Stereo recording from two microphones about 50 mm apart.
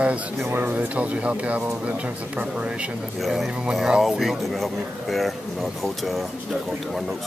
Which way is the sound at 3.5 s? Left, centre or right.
Centre.